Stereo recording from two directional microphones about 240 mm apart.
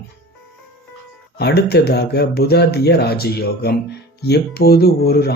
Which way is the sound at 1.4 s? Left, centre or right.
Left.